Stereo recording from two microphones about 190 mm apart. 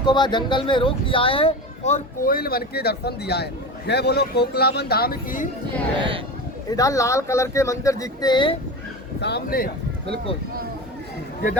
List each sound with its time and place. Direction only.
0.0 s speech: 25° left (ahead or behind); by 5.5 s 50° left (ahead or behind)
6.0 s speech: 25° right (ahead or behind)
6.7 s speech: 20° left (ahead or behind)
9.2 s speech: 55° left (ahead or behind)